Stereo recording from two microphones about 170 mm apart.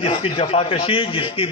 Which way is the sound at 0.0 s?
30° left (ahead or behind).